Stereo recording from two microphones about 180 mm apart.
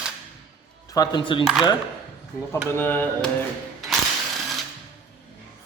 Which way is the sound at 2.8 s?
10° left (ahead or behind).